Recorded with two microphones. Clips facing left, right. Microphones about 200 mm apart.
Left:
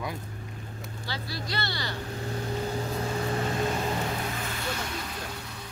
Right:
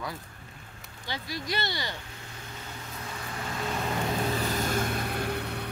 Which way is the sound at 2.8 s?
35° left (ahead or behind).